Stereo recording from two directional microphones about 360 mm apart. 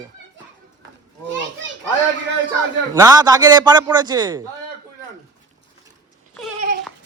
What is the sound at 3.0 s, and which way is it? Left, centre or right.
Speech, centre.